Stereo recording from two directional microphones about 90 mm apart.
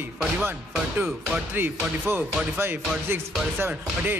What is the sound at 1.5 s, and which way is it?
Speech, 25° right (ahead or behind).